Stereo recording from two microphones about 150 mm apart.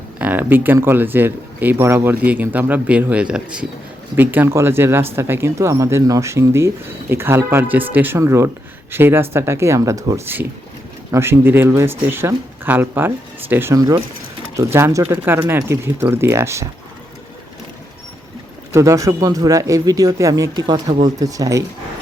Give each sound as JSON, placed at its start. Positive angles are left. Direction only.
{"t": 0.2, "sound": "speech", "side_deg": -10}
{"t": 18.7, "sound": "speech", "side_deg": -20}